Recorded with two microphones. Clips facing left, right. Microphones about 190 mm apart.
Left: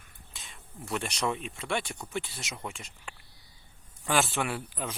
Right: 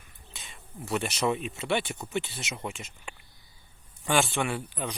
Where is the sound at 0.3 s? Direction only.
Centre (ahead or behind).